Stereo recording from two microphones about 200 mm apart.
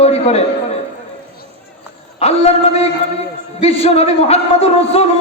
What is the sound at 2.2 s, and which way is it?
A man's voice, 30° left (ahead or behind).